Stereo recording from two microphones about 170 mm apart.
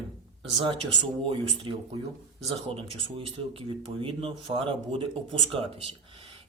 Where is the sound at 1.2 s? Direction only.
30° right (ahead or behind).